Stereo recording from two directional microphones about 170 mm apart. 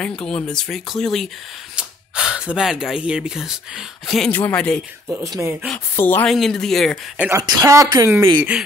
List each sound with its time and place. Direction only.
0.0 s speech: 5° left (ahead or behind)
5.0 s speech: 10° right (ahead or behind)
5.7 s speech: 10° left (ahead or behind)
6.3 s speech: centre (ahead or behind)
7.2 s speech: 15° right (ahead or behind)
8.4 s speech: 5° right (ahead or behind)